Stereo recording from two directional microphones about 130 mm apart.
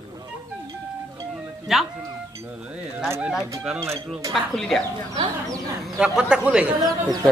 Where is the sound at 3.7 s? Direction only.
20° right (ahead or behind).